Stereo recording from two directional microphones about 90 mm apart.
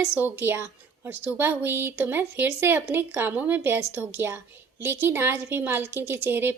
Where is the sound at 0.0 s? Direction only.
25° right (ahead or behind).